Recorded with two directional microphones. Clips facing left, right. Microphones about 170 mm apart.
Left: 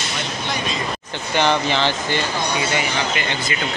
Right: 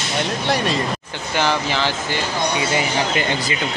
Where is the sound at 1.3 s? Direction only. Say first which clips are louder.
Left 2 dB; 5° right (ahead or behind).